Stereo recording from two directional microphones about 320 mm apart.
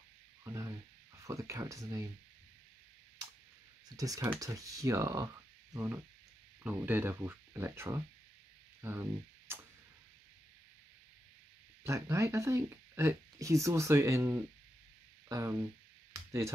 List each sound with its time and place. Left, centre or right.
0.4 s a sound: centre
1.2 s speech: centre
3.9 s speech: centre
11.8 s speech: centre